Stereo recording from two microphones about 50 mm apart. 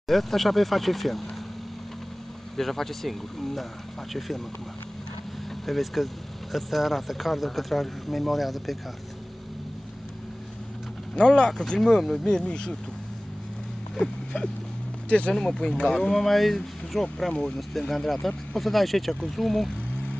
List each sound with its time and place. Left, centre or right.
0.1 s speech: centre
2.5 s speech: centre
5.7 s speech: centre
11.1 s speech: centre
11.8 s speech: centre
12.4 s speech: centre
13.9 s a sound: centre
15.0 s speech: left
15.3 s speech: centre